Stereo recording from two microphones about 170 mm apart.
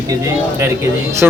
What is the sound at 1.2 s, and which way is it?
Speech, 10° right (ahead or behind).